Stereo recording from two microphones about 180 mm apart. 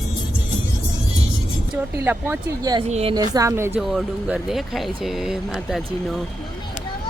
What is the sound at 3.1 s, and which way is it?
Speech, 20° right (ahead or behind).